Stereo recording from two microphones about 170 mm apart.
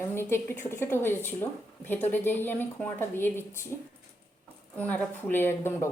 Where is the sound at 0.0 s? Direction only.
15° left (ahead or behind).